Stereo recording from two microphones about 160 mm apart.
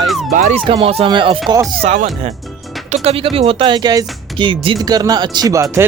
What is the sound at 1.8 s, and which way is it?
Speech, 40° right (ahead or behind).